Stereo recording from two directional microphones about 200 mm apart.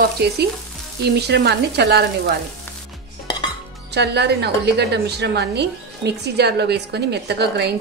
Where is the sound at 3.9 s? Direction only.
55° right (ahead or behind).